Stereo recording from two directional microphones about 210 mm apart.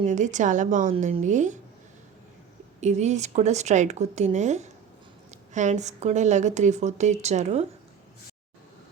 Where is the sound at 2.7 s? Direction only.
35° right (ahead or behind).